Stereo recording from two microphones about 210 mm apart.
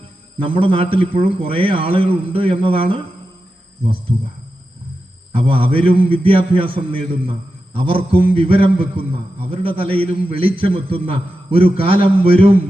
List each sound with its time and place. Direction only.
0.3 s a man's voice: 25° right (ahead or behind)
5.3 s a man's voice: 25° right (ahead or behind)